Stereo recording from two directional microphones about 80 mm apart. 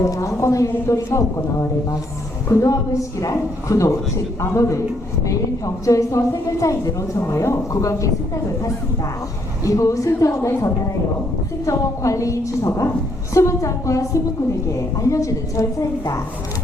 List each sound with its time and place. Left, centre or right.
0.0 s a woman's voice: left
2.5 s a woman's voice: left
9.6 s a woman's voice: left